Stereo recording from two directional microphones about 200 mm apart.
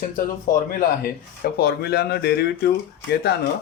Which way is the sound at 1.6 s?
50° left (ahead or behind).